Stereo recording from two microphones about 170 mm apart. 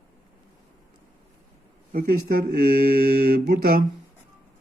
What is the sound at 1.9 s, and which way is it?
Speech, 55° right (ahead or behind).